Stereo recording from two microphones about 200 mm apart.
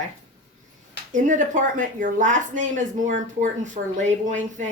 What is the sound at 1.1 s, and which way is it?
Speech, 40° right (ahead or behind).